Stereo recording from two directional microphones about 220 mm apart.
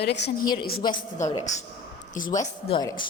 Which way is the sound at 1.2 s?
15° left (ahead or behind).